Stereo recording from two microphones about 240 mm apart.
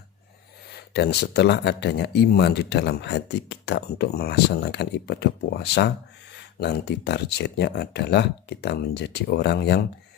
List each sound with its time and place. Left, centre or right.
0.9 s speech: left